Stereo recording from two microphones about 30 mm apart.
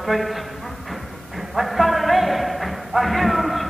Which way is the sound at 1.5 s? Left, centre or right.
Centre.